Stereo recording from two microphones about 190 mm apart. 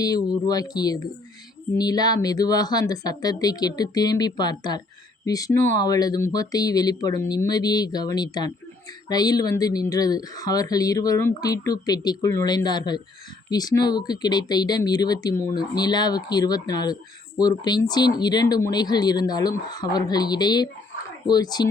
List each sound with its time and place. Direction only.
0.0 s speech: 20° left (ahead or behind)